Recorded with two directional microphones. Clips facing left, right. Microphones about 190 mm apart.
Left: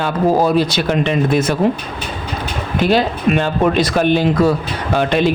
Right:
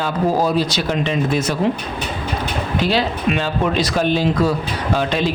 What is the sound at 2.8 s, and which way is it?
A man's voice, 50° left (ahead or behind).